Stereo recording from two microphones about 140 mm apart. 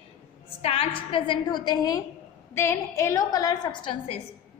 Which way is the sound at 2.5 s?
20° left (ahead or behind).